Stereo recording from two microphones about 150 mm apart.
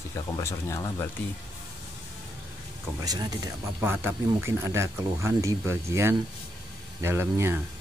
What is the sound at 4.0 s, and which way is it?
Speech, 15° right (ahead or behind).